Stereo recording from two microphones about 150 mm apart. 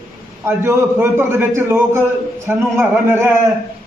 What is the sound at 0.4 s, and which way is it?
A man's voice, 15° right (ahead or behind).